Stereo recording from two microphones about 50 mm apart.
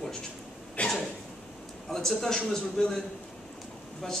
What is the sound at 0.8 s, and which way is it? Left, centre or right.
Cough, left.